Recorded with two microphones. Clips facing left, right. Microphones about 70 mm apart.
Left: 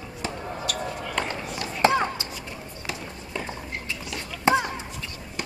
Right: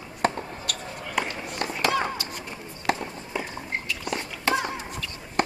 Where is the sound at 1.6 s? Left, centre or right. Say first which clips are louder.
Right 3 dB; right.